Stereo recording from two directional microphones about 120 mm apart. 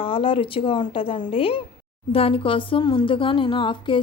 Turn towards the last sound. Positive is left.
turn(degrees=45)  # may be behind; listen again after turning